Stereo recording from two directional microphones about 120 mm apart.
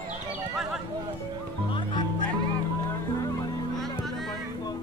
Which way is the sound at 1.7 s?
40° left (ahead or behind).